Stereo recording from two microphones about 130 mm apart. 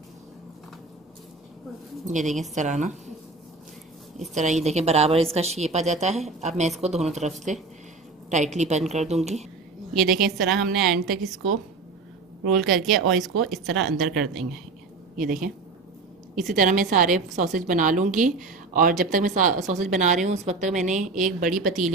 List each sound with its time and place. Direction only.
2.0 s a woman's voice: 70° right (ahead or behind)
4.3 s a woman's voice: 65° right (ahead or behind)
9.9 s speech: centre (ahead or behind)
12.4 s speech: centre (ahead or behind)
16.5 s a woman's voice: 85° right
17.4 s a woman's voice: 75° right (ahead or behind)
21.4 s a woman's voice: 90° right